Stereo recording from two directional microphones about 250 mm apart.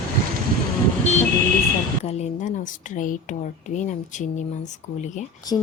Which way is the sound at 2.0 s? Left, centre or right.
Left.